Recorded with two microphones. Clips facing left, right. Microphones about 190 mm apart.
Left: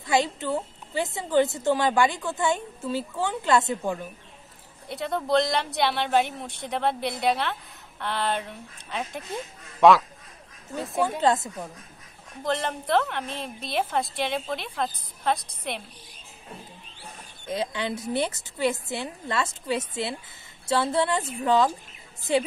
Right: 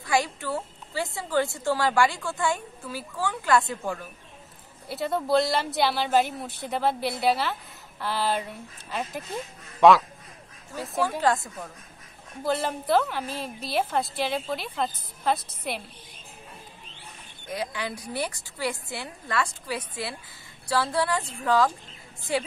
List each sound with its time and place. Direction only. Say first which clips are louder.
0.0 s a woman's voice: left 2 dB; 20° left (ahead or behind)
4.8 s speech: right 1 dB; 5° right (ahead or behind)
11.0 s a woman's voice: left 1 dB; 20° left (ahead or behind)
12.4 s speech: right 1 dB; 5° right (ahead or behind)
17.5 s a woman's voice: left 3 dB; 25° left (ahead or behind)